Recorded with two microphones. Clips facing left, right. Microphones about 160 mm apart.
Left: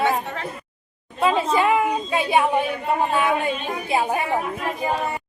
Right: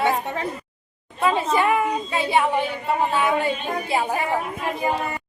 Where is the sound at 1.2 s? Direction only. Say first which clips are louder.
Left 1 dB; 15° left (ahead or behind).